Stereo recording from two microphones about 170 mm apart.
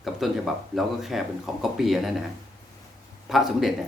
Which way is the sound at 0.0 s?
Centre (ahead or behind).